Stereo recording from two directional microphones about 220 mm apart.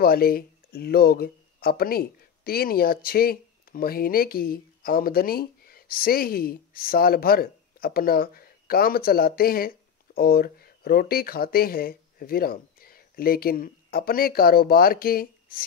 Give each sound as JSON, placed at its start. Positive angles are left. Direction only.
{"t": 0.0, "sound": "speech", "side_deg": 40}